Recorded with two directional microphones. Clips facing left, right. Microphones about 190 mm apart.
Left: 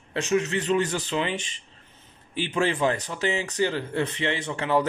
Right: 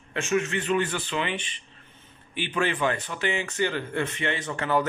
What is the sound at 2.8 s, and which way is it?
A man's voice, 35° left (ahead or behind).